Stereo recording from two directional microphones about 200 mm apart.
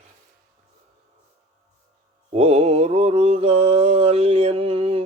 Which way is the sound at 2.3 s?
30° right (ahead or behind).